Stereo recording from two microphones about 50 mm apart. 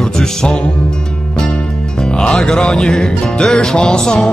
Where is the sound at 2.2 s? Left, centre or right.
Centre.